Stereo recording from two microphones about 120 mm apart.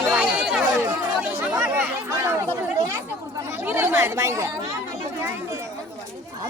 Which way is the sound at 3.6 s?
15° right (ahead or behind).